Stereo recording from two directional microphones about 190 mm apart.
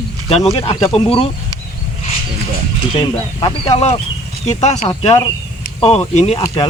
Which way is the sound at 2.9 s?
30° left (ahead or behind).